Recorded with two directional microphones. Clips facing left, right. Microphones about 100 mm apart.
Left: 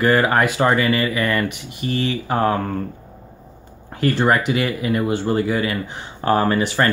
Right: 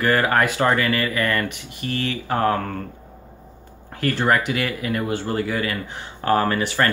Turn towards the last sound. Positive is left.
turn(degrees=20)  # may be behind; listen again after turning